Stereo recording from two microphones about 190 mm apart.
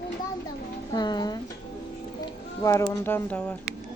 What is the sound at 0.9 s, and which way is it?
Speech, 20° left (ahead or behind).